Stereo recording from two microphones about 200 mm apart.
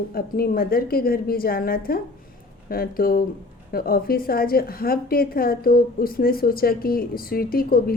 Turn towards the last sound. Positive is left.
turn(degrees=50)  # may be behind; listen again after turning